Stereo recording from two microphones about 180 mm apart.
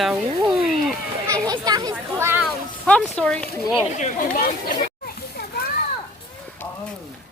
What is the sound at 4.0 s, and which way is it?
Speech, 50° left (ahead or behind).